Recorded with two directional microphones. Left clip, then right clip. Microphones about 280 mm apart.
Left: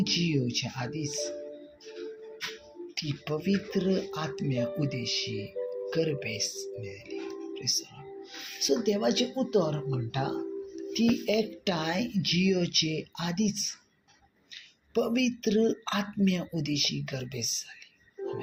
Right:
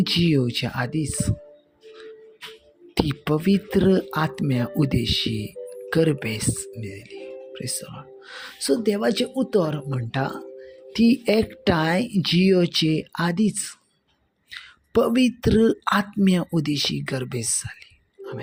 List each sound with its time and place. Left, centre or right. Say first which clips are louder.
0.0 s speech: right 7 dB; right
2.9 s speech: right 10 dB; right
7.1 s music: right 1 dB; right
8.6 s speech: right 5 dB; right
14.5 s a sound: right 8 dB; right
15.4 s speech: right 7 dB; right